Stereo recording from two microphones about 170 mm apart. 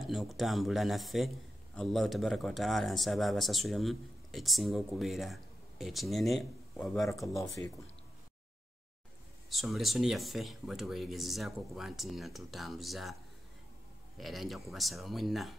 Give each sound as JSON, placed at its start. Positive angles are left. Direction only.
{"t": 0.0, "sound": "speech", "side_deg": 0}
{"t": 7.1, "sound": "speech", "side_deg": 20}
{"t": 9.5, "sound": "speech", "side_deg": 0}
{"t": 14.1, "sound": "speech", "side_deg": 0}